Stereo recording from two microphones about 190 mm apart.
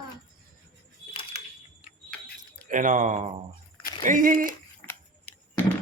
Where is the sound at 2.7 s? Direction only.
45° right (ahead or behind).